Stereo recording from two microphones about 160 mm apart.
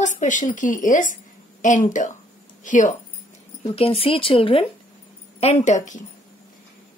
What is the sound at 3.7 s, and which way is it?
Speech, 35° left (ahead or behind).